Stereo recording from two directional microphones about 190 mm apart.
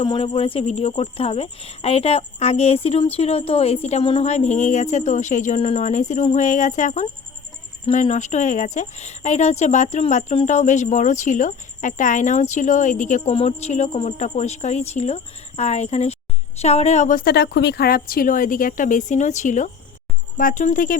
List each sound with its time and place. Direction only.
0.0 s a woman's voice: 30° left (ahead or behind); by 21.0 s 45° left (ahead or behind)